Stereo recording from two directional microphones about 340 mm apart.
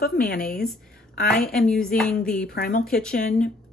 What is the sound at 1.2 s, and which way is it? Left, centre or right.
Speech, centre.